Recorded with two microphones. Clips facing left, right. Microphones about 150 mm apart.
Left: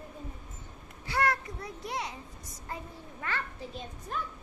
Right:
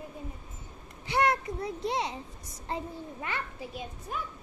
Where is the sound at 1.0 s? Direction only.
20° right (ahead or behind).